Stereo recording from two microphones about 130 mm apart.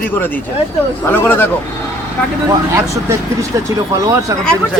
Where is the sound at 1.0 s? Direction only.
20° left (ahead or behind).